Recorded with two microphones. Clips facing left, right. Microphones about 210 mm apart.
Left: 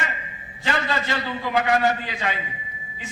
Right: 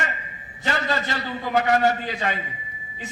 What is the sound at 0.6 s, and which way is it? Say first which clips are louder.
A man's voice: even; 40° right (ahead or behind).